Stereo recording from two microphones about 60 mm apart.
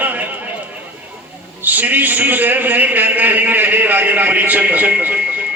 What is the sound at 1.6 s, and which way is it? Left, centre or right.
A man's voice, right.